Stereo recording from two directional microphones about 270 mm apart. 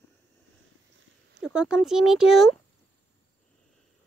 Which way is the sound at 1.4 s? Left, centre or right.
Centre.